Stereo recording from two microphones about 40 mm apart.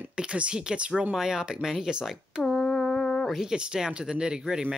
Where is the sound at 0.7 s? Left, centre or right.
Right.